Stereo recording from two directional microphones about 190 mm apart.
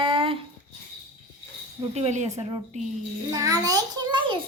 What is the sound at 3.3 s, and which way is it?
A woman's voice, 20° right (ahead or behind).